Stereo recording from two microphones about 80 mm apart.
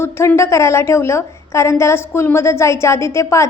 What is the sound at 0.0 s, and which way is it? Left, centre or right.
A woman's voice, left.